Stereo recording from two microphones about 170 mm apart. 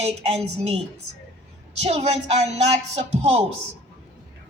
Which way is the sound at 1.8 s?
40° right (ahead or behind).